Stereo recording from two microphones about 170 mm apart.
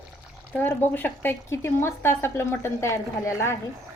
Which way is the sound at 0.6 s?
10° left (ahead or behind).